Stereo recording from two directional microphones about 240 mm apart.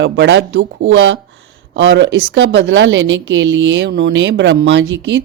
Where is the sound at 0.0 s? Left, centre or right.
Right.